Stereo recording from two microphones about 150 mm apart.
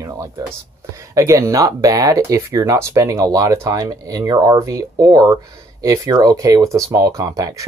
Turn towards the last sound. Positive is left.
turn(degrees=-25)  # may be behind; listen again after turning